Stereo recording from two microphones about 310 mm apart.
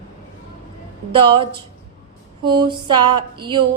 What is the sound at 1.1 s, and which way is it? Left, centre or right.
Speech, centre.